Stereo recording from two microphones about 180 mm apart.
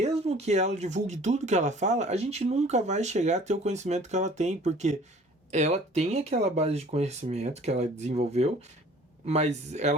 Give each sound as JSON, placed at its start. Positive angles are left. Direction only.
{"t": 0.0, "sound": "speech", "side_deg": -35}